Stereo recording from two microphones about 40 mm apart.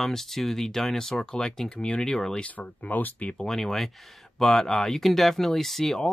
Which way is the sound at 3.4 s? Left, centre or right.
Centre.